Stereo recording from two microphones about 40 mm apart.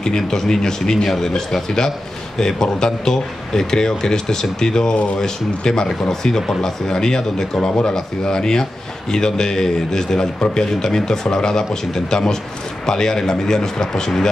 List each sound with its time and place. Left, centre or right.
0.0 s a man's voice: centre